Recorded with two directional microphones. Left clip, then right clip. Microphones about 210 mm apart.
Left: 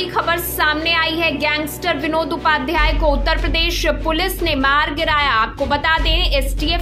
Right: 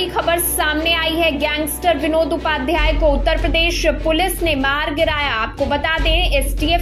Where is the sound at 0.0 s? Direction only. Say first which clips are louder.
Right 1 dB; 5° left (ahead or behind).